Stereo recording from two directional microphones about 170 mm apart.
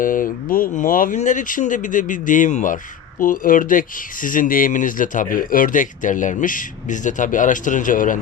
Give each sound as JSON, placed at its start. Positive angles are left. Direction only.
{"t": 0.0, "sound": "speech", "side_deg": 55}